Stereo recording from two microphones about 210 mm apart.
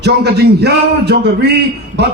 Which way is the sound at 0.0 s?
50° right (ahead or behind).